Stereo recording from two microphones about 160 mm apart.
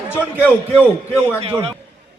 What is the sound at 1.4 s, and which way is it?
Speech, 35° right (ahead or behind).